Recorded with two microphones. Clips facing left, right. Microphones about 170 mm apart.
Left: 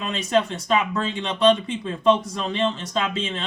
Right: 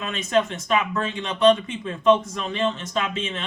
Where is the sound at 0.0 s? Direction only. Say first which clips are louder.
Even; 35° left (ahead or behind).